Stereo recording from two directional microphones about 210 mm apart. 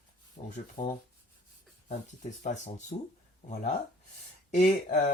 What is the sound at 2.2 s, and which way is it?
Mantra, 35° left (ahead or behind).